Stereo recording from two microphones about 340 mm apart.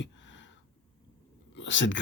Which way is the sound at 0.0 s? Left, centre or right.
Left.